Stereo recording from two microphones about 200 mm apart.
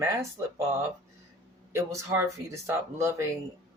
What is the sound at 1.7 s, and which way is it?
Speech, 15° right (ahead or behind).